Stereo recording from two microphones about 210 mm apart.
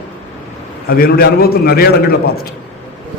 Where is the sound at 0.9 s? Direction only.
45° left (ahead or behind).